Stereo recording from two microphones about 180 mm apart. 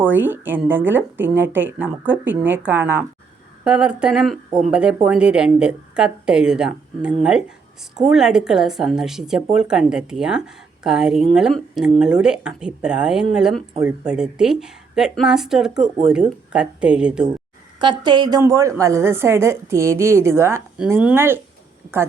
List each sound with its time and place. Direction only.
0.0 s a woman's voice: 10° right (ahead or behind)
17.7 s speech: 25° right (ahead or behind); by 21.3 s 10° right (ahead or behind)